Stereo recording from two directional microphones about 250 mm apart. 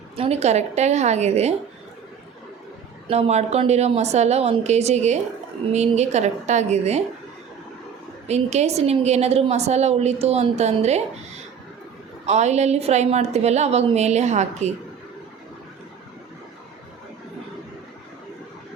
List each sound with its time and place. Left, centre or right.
0.2 s a woman's voice: right
3.1 s a woman's voice: right
8.3 s a woman's voice: right
12.2 s a woman's voice: right